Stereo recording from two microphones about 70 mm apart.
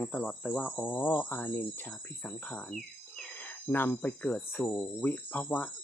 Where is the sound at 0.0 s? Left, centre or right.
Left.